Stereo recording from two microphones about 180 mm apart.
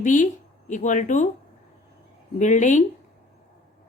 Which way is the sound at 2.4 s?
40° left (ahead or behind).